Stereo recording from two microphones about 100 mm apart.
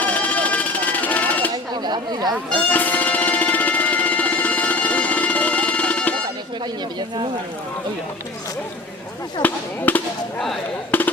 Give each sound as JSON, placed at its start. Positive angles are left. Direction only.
{"t": 0.0, "sound": "music", "side_deg": 15}
{"t": 1.7, "sound": "chatter", "side_deg": -45}
{"t": 2.7, "sound": "music", "side_deg": 15}
{"t": 9.4, "sound": "speech", "side_deg": 15}
{"t": 10.9, "sound": "a sound", "side_deg": 15}